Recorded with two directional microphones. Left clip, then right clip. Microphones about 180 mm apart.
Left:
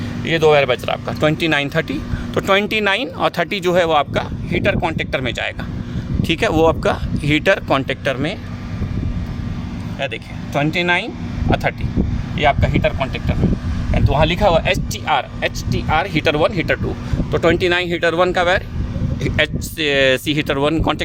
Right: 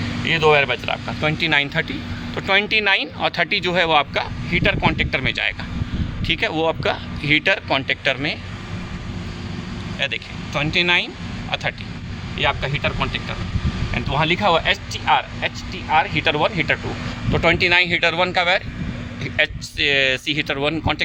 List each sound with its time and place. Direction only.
0.3 s speech: 60° left (ahead or behind)
10.5 s speech: 55° left (ahead or behind)
12.4 s speech: 60° left (ahead or behind)